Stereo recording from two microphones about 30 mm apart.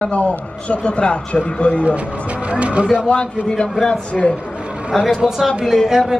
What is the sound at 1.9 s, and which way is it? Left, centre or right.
Speech, right.